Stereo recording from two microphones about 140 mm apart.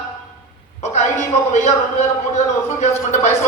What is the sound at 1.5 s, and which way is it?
A woman's voice, 55° left (ahead or behind).